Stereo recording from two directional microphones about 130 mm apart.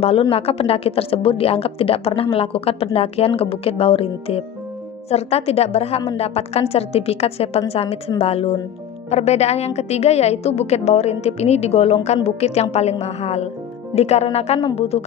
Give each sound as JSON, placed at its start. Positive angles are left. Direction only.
{"t": 0.0, "sound": "a woman's voice", "side_deg": 45}